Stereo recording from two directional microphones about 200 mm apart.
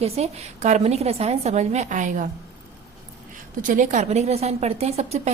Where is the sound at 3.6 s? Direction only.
40° right (ahead or behind).